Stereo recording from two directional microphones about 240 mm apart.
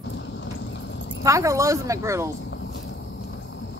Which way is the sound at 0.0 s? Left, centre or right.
Left.